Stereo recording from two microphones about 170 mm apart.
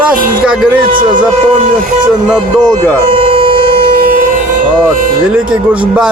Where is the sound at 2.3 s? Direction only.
5° left (ahead or behind).